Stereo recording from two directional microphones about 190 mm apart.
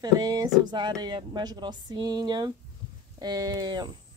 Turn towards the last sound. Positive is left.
turn(degrees=-20)  # may be behind; listen again after turning